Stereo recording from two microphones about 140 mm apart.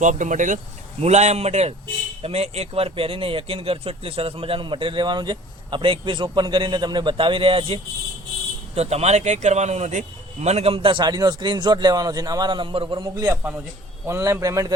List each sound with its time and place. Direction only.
0.0 s speech: 65° right (ahead or behind)
0.9 s a man's voice: 50° right (ahead or behind); by 14.7 s 20° right (ahead or behind)